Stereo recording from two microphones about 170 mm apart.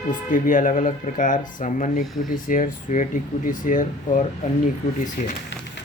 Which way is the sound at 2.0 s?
Centre (ahead or behind).